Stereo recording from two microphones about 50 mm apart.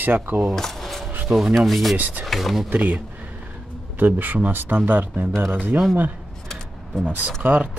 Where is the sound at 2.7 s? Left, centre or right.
Right.